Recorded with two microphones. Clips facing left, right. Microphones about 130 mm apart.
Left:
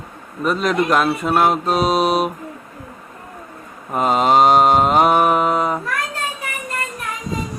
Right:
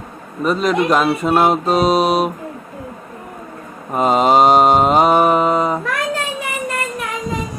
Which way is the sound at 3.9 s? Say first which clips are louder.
Right 2 dB; centre (ahead or behind).